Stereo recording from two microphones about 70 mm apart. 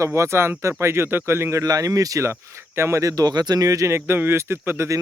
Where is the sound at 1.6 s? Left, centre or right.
Right.